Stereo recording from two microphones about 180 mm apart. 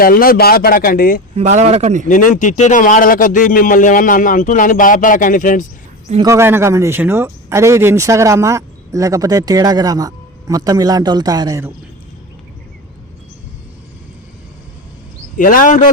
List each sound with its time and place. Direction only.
0.0 s speech: 55° left (ahead or behind)
1.4 s speech: 40° right (ahead or behind)
2.0 s a man's voice: 45° left (ahead or behind)
6.1 s speech: 15° right (ahead or behind)
15.4 s a man's voice: 50° left (ahead or behind)